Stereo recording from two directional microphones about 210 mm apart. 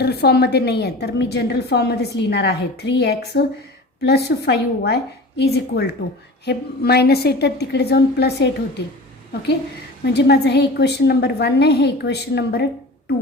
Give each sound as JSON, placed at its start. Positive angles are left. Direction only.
{"t": 0.0, "sound": "a woman's voice", "side_deg": 50}
{"t": 10.0, "sound": "a woman's voice", "side_deg": 55}